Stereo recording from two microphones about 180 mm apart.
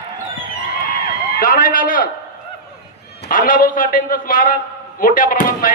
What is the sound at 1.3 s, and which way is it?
Speech, 50° left (ahead or behind).